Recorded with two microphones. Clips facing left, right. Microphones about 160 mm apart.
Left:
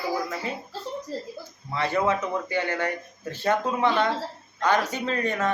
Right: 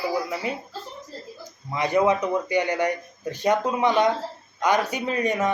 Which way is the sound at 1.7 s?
15° right (ahead or behind).